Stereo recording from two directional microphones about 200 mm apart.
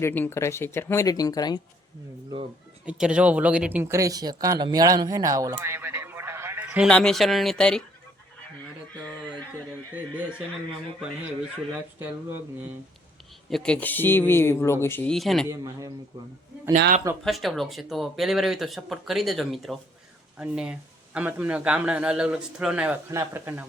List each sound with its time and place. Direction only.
0.0 s speech: 10° left (ahead or behind)
2.8 s speech: 5° right (ahead or behind)
6.8 s speech: 5° left (ahead or behind)
9.9 s speech: 10° right (ahead or behind)
13.5 s speech: 5° left (ahead or behind)
15.4 s speech: 15° right (ahead or behind)
16.7 s a man's voice: 40° right (ahead or behind)
17.2 s speech: centre (ahead or behind)